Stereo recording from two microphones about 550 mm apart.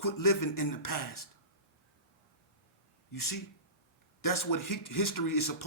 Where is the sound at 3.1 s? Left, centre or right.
Left.